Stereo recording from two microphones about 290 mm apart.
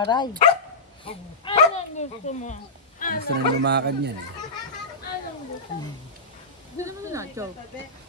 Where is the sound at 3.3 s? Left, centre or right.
Right.